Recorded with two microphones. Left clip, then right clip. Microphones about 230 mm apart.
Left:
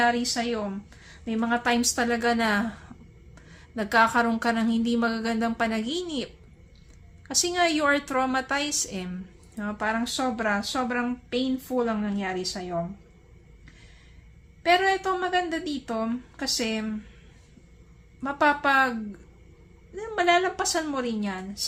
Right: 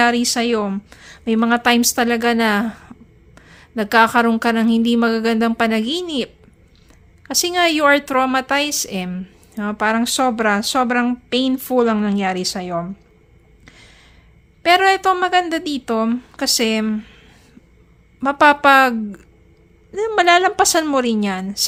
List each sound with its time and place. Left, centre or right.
0.0 s a woman's voice: right
14.6 s a woman's voice: right
18.2 s a woman's voice: right